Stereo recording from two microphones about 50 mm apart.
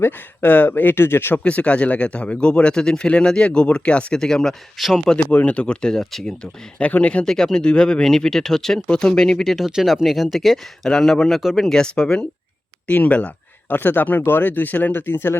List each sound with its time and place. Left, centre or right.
0.4 s speech: left
1.5 s speech: left
4.2 s speech: centre
4.8 s speech: centre
5.1 s speech: left; by 6.2 s centre
6.2 s speech: left
7.3 s speech: centre
12.9 s speech: left
13.7 s speech: left